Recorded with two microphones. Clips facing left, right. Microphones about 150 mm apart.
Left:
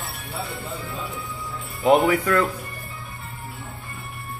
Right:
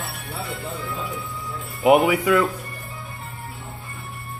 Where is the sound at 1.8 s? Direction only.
10° right (ahead or behind).